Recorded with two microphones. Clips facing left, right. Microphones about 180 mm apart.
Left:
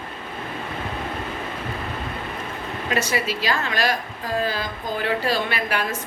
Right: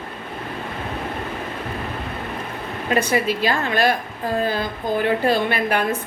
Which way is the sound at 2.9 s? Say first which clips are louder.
Right 5 dB; 50° right (ahead or behind).